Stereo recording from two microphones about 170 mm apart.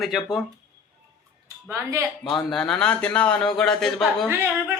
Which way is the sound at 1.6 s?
15° right (ahead or behind).